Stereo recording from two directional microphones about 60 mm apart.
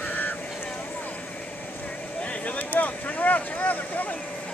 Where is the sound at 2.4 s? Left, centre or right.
Left.